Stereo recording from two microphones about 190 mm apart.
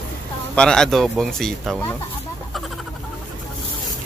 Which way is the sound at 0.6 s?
5° left (ahead or behind).